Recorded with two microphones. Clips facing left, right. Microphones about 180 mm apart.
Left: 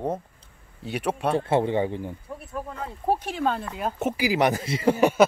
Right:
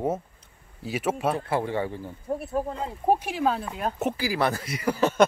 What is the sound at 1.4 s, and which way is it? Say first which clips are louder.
Speech: left 4 dB; 25° left (ahead or behind).